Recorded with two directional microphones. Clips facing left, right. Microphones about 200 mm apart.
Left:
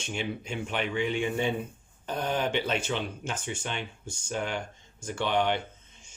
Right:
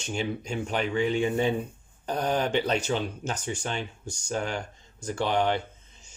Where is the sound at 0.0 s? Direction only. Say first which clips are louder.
Right 3 dB; 40° right (ahead or behind).